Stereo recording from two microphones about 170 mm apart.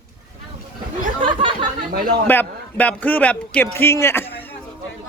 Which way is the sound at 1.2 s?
30° right (ahead or behind).